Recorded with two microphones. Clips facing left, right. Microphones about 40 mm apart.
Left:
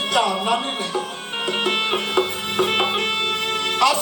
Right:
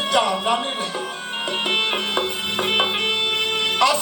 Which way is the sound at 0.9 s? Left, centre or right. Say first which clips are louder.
Left 1 dB; centre.